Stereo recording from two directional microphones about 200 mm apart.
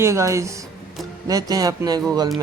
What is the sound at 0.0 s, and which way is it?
Speech, 15° right (ahead or behind).